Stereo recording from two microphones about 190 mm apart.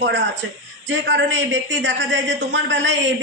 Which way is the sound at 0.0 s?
70° right (ahead or behind).